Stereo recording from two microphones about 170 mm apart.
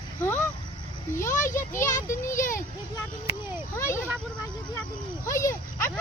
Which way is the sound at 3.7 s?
15° left (ahead or behind).